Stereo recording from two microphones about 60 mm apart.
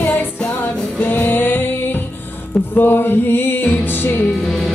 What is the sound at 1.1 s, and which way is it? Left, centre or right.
Music, left.